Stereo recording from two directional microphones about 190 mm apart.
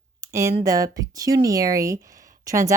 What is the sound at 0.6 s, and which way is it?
Speech, 20° right (ahead or behind).